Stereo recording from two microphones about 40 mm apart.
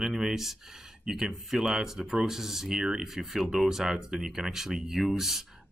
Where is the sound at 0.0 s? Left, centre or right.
Centre.